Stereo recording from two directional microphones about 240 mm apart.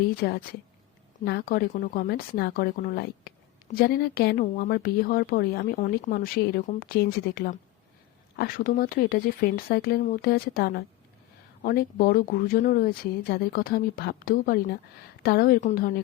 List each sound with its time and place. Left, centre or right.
0.2 s speech: left